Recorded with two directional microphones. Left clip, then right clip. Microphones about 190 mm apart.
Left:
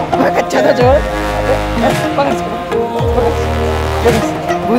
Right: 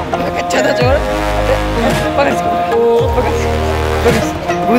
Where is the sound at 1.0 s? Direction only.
Centre (ahead or behind).